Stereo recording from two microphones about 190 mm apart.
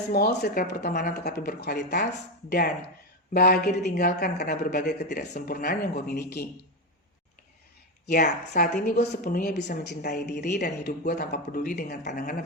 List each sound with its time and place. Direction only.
0.1 s a woman's voice: 55° left (ahead or behind)
3.3 s a woman's voice: 55° left (ahead or behind)
5.5 s a woman's voice: 50° left (ahead or behind)
8.0 s a woman's voice: 50° left (ahead or behind)